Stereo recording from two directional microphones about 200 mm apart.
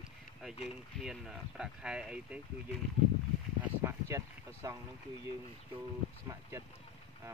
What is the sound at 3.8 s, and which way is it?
Speech, 15° right (ahead or behind).